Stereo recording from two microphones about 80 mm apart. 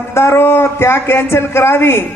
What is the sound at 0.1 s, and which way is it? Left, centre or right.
Speech, left.